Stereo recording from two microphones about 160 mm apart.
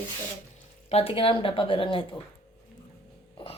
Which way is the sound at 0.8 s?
40° left (ahead or behind).